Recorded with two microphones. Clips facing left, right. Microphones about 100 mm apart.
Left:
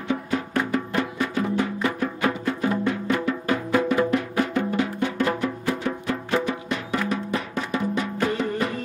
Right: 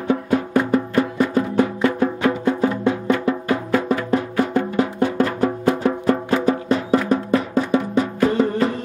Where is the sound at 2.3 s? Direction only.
25° right (ahead or behind).